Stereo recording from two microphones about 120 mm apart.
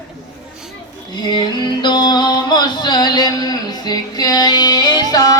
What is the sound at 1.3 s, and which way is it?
Music, 40° left (ahead or behind).